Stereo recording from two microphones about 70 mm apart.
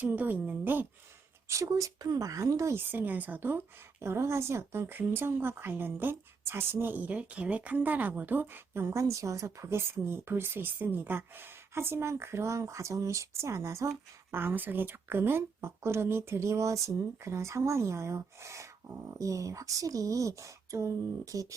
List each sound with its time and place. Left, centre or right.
0.0 s speech: right
1.5 s speech: right
2.7 s speech: right
4.0 s speech: right